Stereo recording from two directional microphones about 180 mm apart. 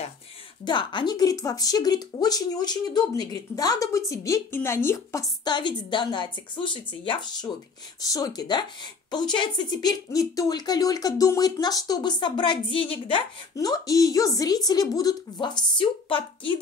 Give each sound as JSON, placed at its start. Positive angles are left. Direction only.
{"t": 0.7, "sound": "speech", "side_deg": 25}